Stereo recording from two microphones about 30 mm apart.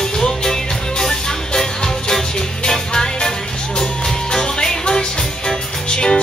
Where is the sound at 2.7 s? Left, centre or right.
Left.